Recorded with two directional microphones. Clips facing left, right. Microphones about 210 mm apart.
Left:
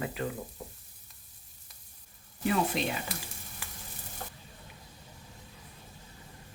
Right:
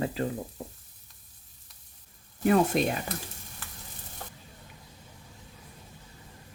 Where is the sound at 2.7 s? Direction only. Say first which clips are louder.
Right 6 dB; 50° right (ahead or behind).